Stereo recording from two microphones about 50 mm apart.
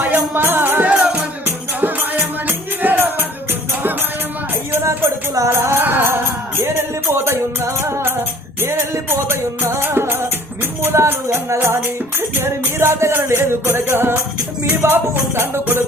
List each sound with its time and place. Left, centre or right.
0.0 s music: right
0.4 s music: right
0.9 s music: right
1.5 s music: right
4.7 s music: right
5.5 s music: right
11.0 s music: right